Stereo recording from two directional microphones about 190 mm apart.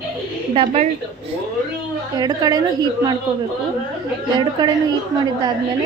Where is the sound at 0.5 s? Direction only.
35° right (ahead or behind).